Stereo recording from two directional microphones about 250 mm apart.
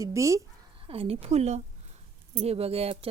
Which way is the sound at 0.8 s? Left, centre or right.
Right.